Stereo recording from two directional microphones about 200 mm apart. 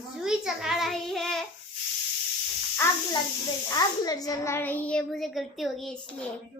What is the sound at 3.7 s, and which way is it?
A child's voice, 20° left (ahead or behind).